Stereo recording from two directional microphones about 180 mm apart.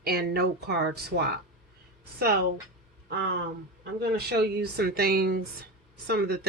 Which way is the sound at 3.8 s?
65° right (ahead or behind).